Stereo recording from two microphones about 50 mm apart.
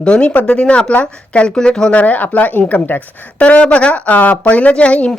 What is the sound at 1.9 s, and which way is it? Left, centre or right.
A woman's voice, left.